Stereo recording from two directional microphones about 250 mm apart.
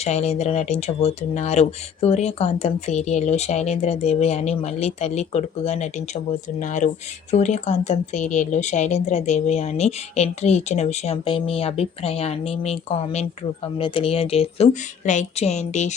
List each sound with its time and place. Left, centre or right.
0.0 s speech: left